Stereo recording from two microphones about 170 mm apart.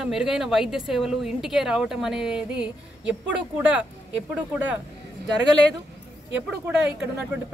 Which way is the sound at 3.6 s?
10° right (ahead or behind).